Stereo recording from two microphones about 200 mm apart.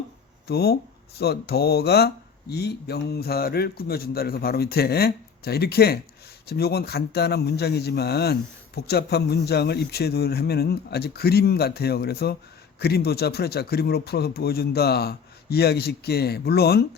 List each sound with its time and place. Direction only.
0.4 s a man's voice: 50° left (ahead or behind)